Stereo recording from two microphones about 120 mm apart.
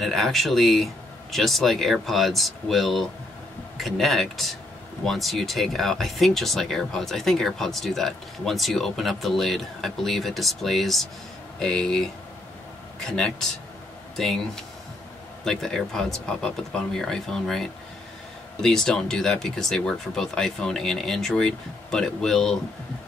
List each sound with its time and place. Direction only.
0.0 s speech: centre (ahead or behind)